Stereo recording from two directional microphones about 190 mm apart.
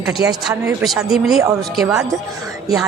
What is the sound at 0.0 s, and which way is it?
A woman's voice, 5° right (ahead or behind).